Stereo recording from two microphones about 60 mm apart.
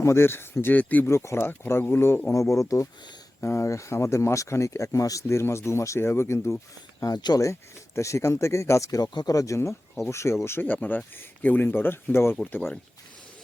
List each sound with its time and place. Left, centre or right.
0.0 s speech: left
0.7 s speech: left
1.0 s speech: left
2.3 s speech: left
3.4 s speech: left
5.3 s speech: left
6.0 s speech: left
7.0 s speech: left
7.9 s speech: left
8.9 s speech: left
10.0 s speech: left
10.6 s speech: left